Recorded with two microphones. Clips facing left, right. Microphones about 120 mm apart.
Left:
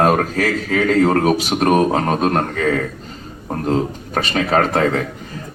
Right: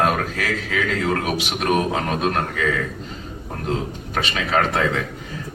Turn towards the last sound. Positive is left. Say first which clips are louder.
# left 4 dB
turn(degrees=40)  # may be behind; listen again after turning